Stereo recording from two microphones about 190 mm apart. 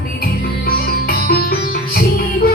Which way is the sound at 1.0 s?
50° left (ahead or behind).